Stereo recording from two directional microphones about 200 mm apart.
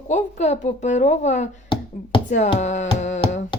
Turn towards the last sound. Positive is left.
turn(degrees=35)  # may be behind; listen again after turning